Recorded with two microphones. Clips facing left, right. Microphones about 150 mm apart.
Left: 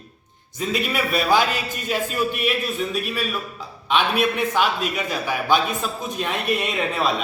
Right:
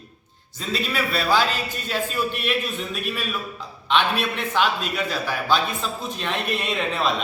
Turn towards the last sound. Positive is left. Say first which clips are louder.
# left 1 dB
turn(degrees=5)  # may be behind; listen again after turning